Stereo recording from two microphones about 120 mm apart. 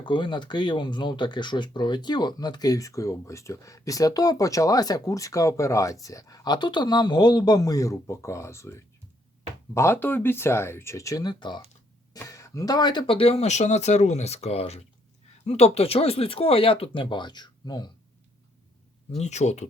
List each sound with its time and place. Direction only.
0.0 s speech: 40° left (ahead or behind)
12.1 s speech: 25° left (ahead or behind)
19.1 s speech: 70° left (ahead or behind)